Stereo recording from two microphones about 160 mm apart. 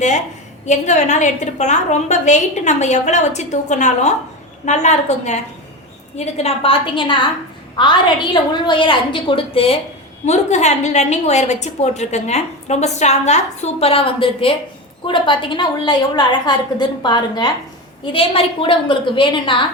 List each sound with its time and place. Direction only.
0.6 s a woman's voice: 50° left (ahead or behind)
10.2 s a woman's voice: 45° left (ahead or behind)